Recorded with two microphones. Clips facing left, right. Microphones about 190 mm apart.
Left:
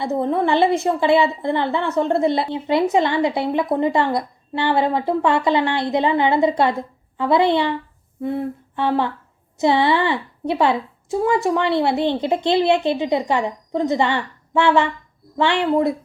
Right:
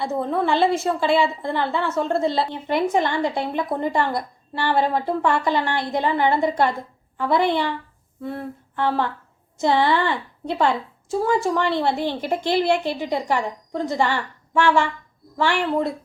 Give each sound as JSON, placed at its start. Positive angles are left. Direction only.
{"t": 0.0, "sound": "a woman's voice", "side_deg": 20}
{"t": 8.2, "sound": "humming", "side_deg": 20}
{"t": 9.6, "sound": "a woman's voice", "side_deg": 20}